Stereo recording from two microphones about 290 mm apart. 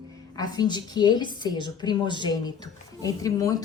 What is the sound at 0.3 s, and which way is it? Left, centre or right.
A woman's voice, centre.